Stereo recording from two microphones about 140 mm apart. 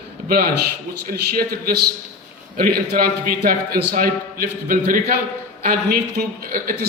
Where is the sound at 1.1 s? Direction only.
90° right.